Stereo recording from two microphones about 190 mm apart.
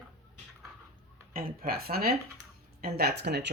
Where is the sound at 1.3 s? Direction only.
50° right (ahead or behind).